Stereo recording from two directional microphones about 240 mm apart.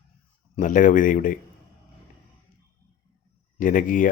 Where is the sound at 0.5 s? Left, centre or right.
Left.